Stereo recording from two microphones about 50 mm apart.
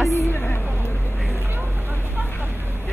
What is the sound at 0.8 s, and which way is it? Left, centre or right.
Vehicle, left.